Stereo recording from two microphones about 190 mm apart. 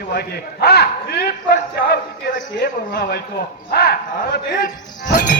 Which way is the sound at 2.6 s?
55° left (ahead or behind).